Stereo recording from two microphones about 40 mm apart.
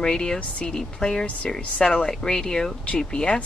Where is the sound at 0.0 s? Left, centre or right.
Centre.